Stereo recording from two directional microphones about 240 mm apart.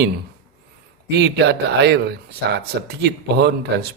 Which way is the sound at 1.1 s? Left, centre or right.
Right.